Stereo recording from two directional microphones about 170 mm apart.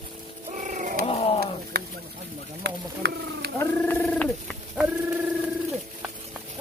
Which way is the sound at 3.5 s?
10° left (ahead or behind).